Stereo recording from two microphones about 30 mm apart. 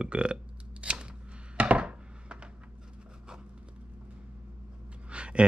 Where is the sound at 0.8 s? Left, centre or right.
Right.